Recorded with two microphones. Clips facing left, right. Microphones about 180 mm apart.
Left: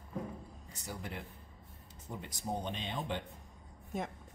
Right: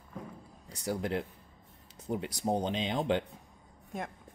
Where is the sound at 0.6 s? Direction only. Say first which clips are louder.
Right 12 dB; 90° right.